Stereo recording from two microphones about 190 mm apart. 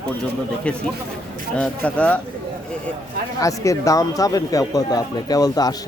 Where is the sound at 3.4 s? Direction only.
15° left (ahead or behind).